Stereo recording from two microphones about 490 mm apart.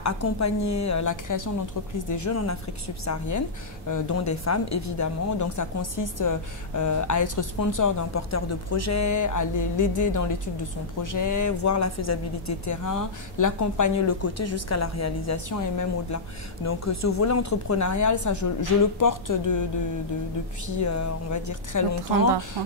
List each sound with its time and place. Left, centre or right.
0.0 s speech: left
20.6 s speech: left